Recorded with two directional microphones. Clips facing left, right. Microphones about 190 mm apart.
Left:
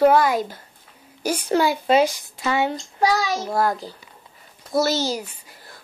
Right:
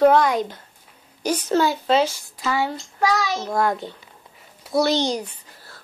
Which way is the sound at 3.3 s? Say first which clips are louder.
Even; 5° left (ahead or behind).